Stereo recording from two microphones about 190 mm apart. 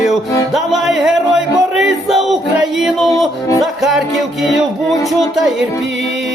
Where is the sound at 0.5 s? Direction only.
Centre (ahead or behind).